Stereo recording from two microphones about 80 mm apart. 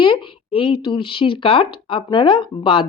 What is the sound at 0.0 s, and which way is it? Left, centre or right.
Speech, left.